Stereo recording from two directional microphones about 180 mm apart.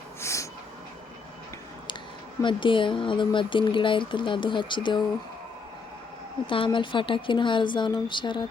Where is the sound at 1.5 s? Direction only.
25° left (ahead or behind).